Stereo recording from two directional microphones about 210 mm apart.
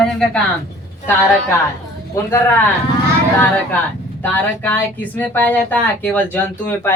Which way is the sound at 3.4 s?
10° left (ahead or behind).